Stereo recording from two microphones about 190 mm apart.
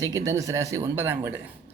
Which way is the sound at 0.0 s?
15° right (ahead or behind).